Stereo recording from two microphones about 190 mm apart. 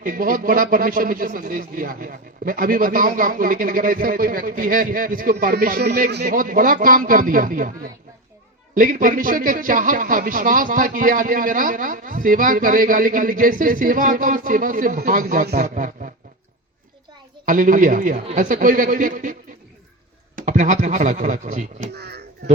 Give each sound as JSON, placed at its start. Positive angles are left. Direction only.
{"t": 0.0, "sound": "speech", "side_deg": -45}
{"t": 6.2, "sound": "speech", "side_deg": -45}
{"t": 17.4, "sound": "speech", "side_deg": -45}
{"t": 21.9, "sound": "speech", "side_deg": -60}